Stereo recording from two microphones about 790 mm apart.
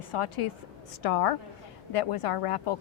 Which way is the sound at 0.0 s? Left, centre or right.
Left.